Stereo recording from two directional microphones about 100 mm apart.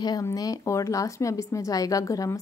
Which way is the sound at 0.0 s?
35° left (ahead or behind).